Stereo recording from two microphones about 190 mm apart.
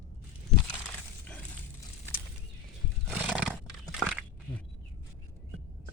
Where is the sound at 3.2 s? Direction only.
5° right (ahead or behind).